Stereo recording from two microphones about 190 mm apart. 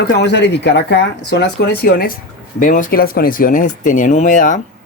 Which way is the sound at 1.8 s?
55° left (ahead or behind).